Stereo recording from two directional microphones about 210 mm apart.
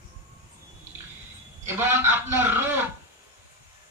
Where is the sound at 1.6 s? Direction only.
10° right (ahead or behind).